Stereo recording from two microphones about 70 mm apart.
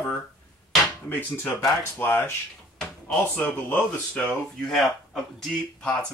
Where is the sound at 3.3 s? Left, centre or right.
Left.